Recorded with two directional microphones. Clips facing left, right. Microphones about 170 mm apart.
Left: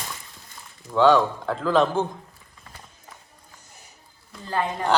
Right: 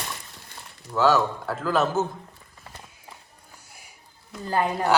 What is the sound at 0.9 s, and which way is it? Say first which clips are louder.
A man's voice: left 3 dB; 5° right (ahead or behind).